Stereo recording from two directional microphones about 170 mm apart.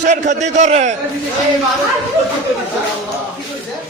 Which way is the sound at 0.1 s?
45° right (ahead or behind).